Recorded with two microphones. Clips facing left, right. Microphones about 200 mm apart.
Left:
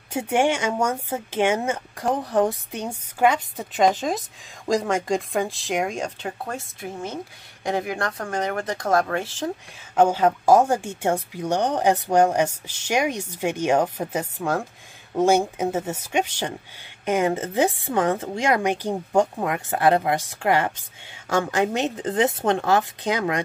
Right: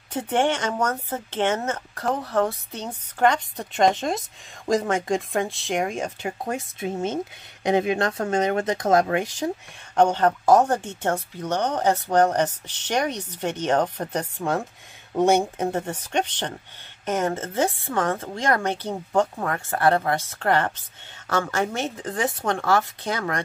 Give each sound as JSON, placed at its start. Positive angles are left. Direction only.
{"t": 0.1, "sound": "speech", "side_deg": 10}
{"t": 6.4, "sound": "speech", "side_deg": -20}
{"t": 9.9, "sound": "speech", "side_deg": 5}